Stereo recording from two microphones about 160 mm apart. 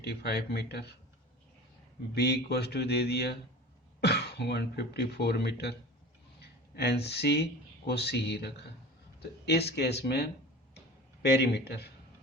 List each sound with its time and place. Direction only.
0.0 s speech: 90° left
2.1 s speech: 90° left
11.2 s speech: 90° left